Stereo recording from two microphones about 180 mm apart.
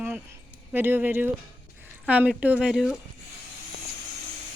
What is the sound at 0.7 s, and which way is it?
Speech, 10° right (ahead or behind).